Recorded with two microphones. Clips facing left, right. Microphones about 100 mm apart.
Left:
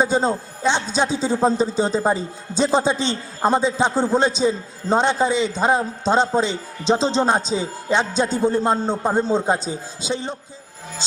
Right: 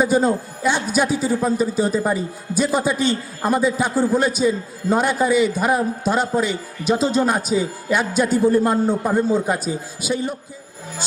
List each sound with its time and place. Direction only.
0.0 s a man's voice: 25° left (ahead or behind)